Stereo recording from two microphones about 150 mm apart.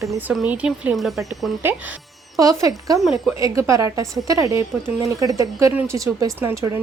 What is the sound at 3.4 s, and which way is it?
A woman's voice, 20° right (ahead or behind).